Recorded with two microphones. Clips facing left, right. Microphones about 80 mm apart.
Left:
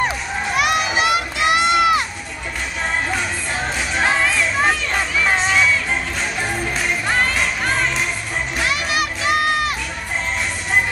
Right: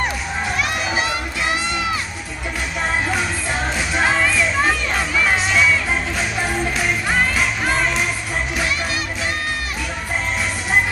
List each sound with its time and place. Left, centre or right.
0.6 s a sound: left
1.5 s crowd: left
3.1 s music: centre